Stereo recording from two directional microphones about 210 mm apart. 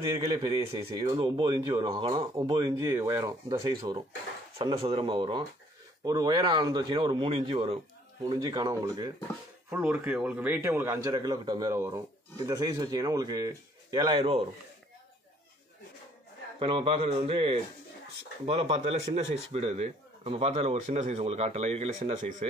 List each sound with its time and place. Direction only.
0.2 s a man's voice: 25° right (ahead or behind)
16.5 s speech: 25° right (ahead or behind)
18.4 s speech: 25° right (ahead or behind)